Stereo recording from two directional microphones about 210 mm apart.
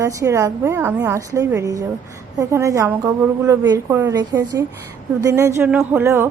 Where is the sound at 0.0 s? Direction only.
15° right (ahead or behind).